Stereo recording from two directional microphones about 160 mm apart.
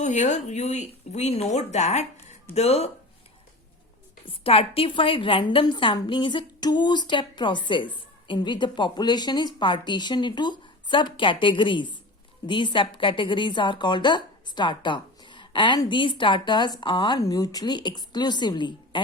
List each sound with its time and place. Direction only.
0.0 s speech: 50° left (ahead or behind)
4.3 s a woman's voice: 35° left (ahead or behind)